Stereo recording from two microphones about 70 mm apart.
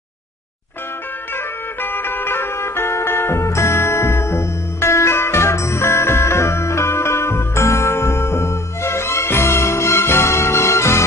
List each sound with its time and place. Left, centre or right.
1.3 s music: left